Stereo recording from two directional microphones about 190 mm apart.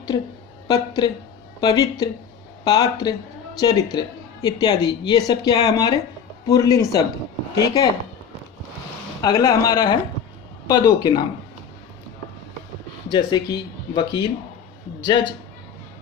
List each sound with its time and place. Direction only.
0.7 s speech: 20° left (ahead or behind)
9.2 s speech: 20° left (ahead or behind)
13.1 s speech: 25° left (ahead or behind)